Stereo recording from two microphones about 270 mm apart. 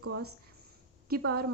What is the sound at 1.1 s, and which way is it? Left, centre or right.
Speech, right.